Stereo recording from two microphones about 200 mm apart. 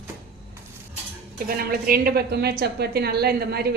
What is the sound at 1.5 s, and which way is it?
A woman's voice, 50° right (ahead or behind).